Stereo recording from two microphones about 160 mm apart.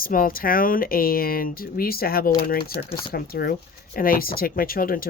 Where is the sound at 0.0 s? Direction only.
65° left (ahead or behind).